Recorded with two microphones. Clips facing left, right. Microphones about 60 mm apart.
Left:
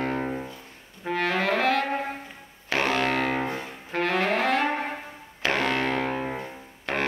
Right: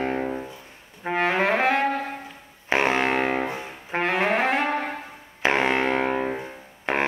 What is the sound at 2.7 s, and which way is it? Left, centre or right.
Music, right.